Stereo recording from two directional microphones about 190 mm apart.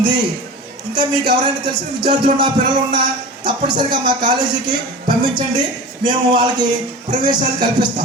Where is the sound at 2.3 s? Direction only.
25° right (ahead or behind).